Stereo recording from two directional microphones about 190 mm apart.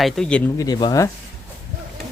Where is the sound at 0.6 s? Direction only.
20° left (ahead or behind).